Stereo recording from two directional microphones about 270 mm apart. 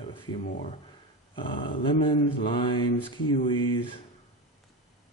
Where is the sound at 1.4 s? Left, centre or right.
Centre.